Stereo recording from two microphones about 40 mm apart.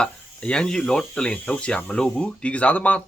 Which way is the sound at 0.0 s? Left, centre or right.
Left.